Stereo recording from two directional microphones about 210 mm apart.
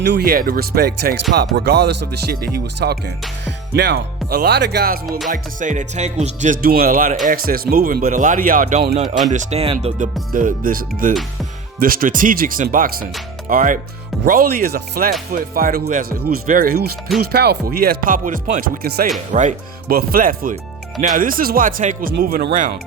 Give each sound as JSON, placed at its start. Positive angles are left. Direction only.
{"t": 0.0, "sound": "music", "side_deg": -50}
{"t": 5.3, "sound": "speech", "side_deg": -35}
{"t": 9.3, "sound": "speech", "side_deg": -30}
{"t": 14.5, "sound": "music", "side_deg": -45}
{"t": 19.3, "sound": "speech", "side_deg": -35}